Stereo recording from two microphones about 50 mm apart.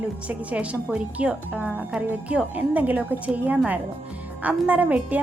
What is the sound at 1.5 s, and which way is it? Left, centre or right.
A woman's voice, right.